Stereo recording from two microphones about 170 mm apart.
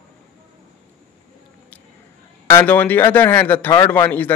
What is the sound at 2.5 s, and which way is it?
Speech, 10° left (ahead or behind).